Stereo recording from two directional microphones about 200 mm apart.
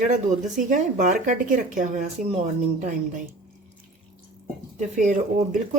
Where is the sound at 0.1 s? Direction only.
40° right (ahead or behind).